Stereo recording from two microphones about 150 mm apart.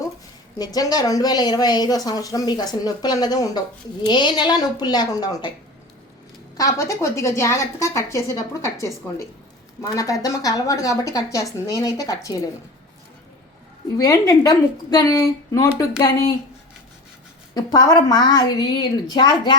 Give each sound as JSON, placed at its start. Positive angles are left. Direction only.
{"t": 0.6, "sound": "speech", "side_deg": 25}
{"t": 6.6, "sound": "speech", "side_deg": 20}
{"t": 13.9, "sound": "speech", "side_deg": 25}
{"t": 17.5, "sound": "speech", "side_deg": 25}